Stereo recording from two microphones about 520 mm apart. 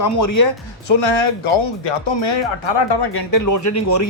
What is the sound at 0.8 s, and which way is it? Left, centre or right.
Speech, left.